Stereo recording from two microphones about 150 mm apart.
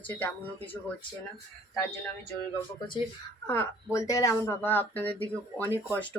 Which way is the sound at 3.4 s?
15° left (ahead or behind).